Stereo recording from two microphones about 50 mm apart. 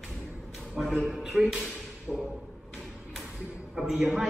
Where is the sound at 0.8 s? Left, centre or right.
Centre.